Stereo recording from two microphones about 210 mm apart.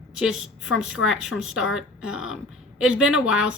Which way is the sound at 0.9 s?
80° left.